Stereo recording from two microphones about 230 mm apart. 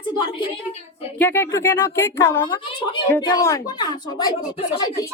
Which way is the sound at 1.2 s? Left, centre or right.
Centre.